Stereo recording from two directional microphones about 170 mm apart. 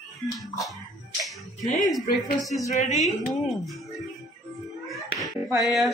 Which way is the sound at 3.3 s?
Centre (ahead or behind).